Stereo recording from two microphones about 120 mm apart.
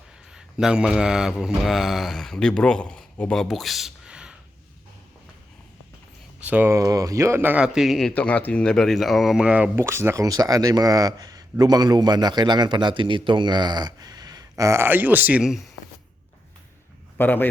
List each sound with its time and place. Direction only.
0.3 s speech: 5° right (ahead or behind)
6.4 s speech: 15° right (ahead or behind)
6.7 s speech: 30° right (ahead or behind); by 9.6 s 10° right (ahead or behind)
9.7 s speech: 20° right (ahead or behind); by 15.6 s 5° right (ahead or behind)
17.2 s a man's voice: 15° left (ahead or behind)